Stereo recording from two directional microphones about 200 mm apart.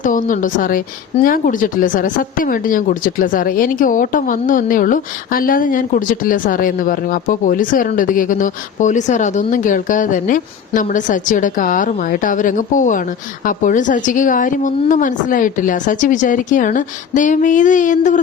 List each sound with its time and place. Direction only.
0.0 s a woman's voice: 40° left (ahead or behind)